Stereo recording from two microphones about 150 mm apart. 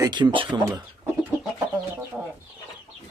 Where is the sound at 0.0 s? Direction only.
30° right (ahead or behind).